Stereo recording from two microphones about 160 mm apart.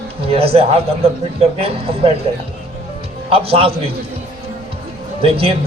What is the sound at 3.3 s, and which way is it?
Speech, 35° right (ahead or behind).